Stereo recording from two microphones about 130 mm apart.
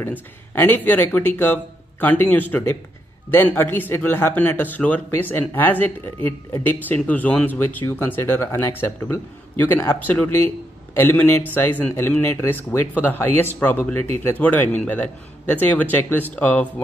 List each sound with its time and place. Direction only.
0.0 s a man's voice: 15° left (ahead or behind)